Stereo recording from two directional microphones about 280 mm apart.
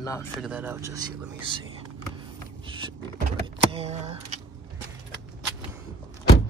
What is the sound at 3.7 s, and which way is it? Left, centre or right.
Power windows, right.